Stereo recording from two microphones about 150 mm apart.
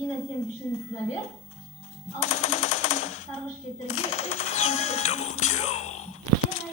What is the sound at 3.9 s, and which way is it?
Music, 45° left (ahead or behind).